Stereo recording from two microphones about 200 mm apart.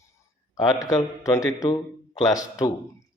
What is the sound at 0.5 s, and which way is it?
Speech, 15° left (ahead or behind).